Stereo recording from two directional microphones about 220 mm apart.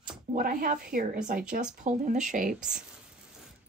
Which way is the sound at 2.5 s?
5° right (ahead or behind).